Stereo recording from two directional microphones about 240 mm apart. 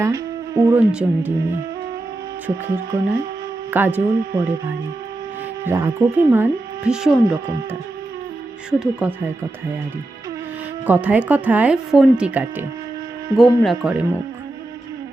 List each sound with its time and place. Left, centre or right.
0.0 s speech: centre
2.9 s speech: centre
5.6 s speech: centre
8.8 s speech: centre
10.8 s speech: centre